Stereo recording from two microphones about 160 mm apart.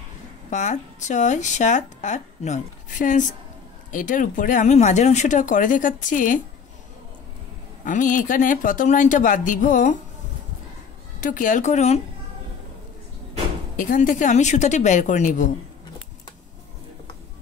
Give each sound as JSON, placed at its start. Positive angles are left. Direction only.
{"t": 0.5, "sound": "a woman's voice", "side_deg": 50}
{"t": 7.8, "sound": "speech", "side_deg": 55}
{"t": 11.1, "sound": "a woman's voice", "side_deg": 55}
{"t": 13.7, "sound": "a woman's voice", "side_deg": 55}